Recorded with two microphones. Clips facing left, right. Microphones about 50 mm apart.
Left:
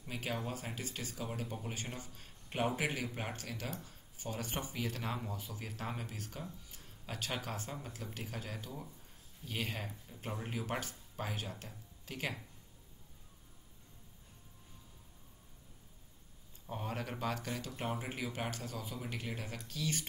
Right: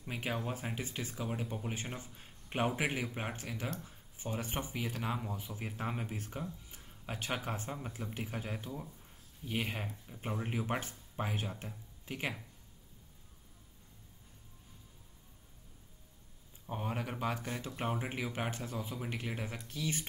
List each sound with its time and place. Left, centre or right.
0.1 s speech: right
1.4 s speech: centre
5.4 s speech: right
16.6 s speech: centre